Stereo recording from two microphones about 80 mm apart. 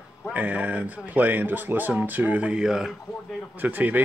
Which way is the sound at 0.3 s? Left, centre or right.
Centre.